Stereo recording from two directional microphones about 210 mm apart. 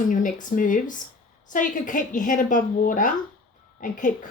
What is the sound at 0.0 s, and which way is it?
Speech, 40° left (ahead or behind).